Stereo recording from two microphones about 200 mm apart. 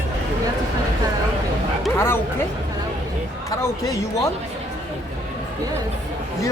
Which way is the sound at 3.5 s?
15° left (ahead or behind).